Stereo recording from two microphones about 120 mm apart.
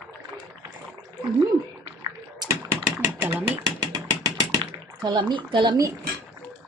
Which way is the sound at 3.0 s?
15° right (ahead or behind).